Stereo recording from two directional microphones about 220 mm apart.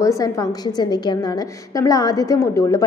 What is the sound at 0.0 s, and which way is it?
A woman's voice, 15° left (ahead or behind).